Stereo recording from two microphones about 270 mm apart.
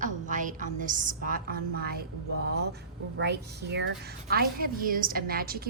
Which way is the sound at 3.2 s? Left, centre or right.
Right.